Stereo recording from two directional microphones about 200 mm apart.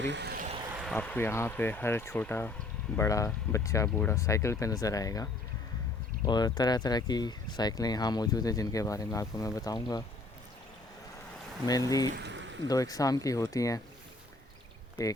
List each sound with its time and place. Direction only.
0.0 s vehicle: 60° right (ahead or behind)
0.9 s speech: 10° left (ahead or behind)
11.6 s speech: 20° left (ahead or behind)
12.1 s a sound: 60° right (ahead or behind)
12.6 s speech: 20° left (ahead or behind)